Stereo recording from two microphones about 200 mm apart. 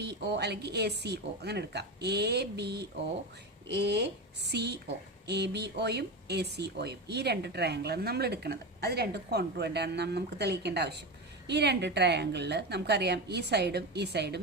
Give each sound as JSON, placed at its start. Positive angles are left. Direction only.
{"t": 0.0, "sound": "speech", "side_deg": -55}